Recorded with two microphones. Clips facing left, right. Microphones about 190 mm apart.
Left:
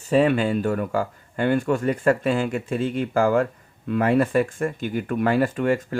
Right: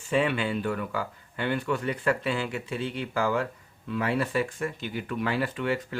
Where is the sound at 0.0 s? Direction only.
40° left (ahead or behind).